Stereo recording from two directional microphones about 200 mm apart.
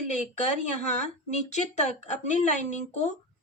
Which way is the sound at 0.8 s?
35° left (ahead or behind).